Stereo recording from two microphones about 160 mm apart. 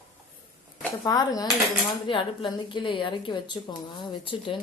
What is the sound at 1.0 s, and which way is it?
A woman's voice, 25° left (ahead or behind).